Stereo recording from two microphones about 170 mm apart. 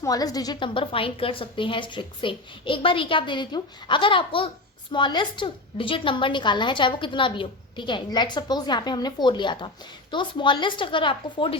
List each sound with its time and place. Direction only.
0.0 s a woman's voice: 20° left (ahead or behind)